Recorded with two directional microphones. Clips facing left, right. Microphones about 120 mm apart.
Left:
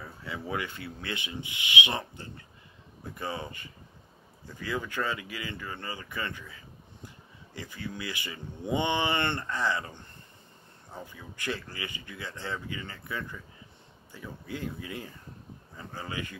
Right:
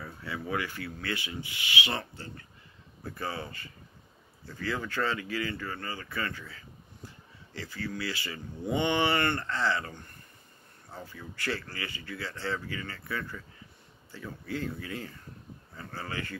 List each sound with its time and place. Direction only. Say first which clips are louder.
0.2 s speech: right 1 dB; 20° left (ahead or behind)